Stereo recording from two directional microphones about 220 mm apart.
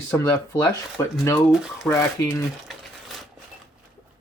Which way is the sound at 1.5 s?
Centre (ahead or behind).